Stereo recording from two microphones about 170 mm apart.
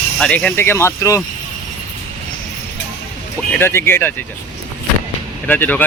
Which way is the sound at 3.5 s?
15° left (ahead or behind).